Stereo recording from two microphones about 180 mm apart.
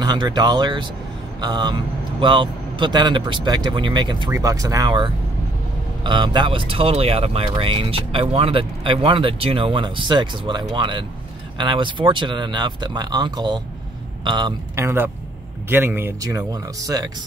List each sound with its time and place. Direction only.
0.0 s speech: 25° right (ahead or behind)